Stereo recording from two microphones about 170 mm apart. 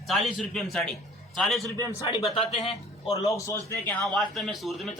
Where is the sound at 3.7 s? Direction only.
10° left (ahead or behind).